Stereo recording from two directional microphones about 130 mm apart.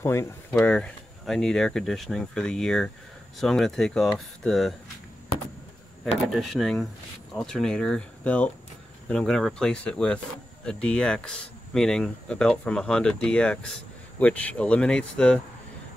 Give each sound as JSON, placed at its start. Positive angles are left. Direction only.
{"t": 0.0, "sound": "speech", "side_deg": 20}
{"t": 0.5, "sound": "speech", "side_deg": 5}
{"t": 6.2, "sound": "speech", "side_deg": 0}